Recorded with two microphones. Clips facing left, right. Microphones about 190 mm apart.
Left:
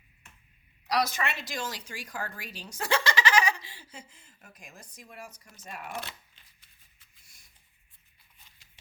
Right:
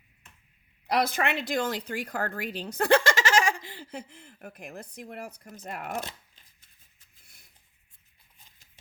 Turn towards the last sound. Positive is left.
turn(degrees=-50)  # may be behind; listen again after turning